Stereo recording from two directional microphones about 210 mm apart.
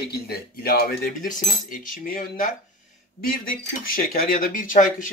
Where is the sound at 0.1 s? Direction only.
45° left (ahead or behind).